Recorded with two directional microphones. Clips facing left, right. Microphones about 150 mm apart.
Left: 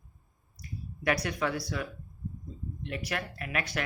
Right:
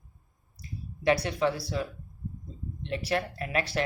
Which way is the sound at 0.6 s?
25° right (ahead or behind).